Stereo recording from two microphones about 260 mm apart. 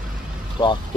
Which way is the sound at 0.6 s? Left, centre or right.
Centre.